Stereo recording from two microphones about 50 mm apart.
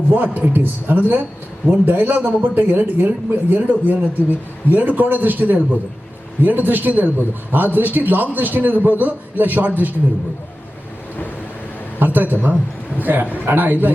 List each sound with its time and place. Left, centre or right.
0.1 s a man's voice: right
11.9 s a man's voice: right